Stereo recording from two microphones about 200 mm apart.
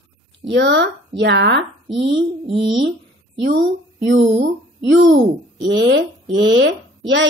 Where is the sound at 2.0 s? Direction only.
25° right (ahead or behind).